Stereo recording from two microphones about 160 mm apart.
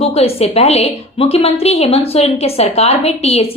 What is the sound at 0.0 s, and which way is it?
A woman's voice, 40° left (ahead or behind).